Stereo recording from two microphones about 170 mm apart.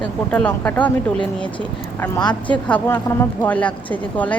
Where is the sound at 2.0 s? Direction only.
20° left (ahead or behind).